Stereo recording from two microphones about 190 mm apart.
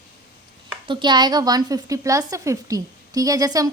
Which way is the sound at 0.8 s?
25° right (ahead or behind).